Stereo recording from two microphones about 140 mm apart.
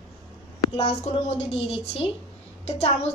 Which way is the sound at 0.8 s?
50° left (ahead or behind).